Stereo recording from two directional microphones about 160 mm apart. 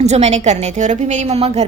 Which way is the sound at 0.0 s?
45° right (ahead or behind).